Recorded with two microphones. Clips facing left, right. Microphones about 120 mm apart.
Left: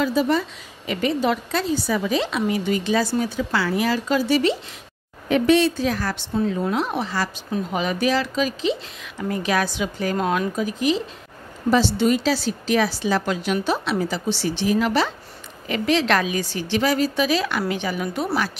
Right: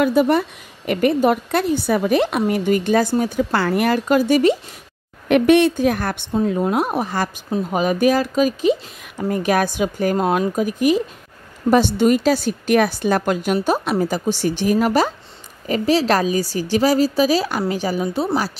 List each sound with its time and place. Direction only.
0.0 s a woman's voice: 55° right (ahead or behind)
6.3 s a woman's voice: 45° right (ahead or behind)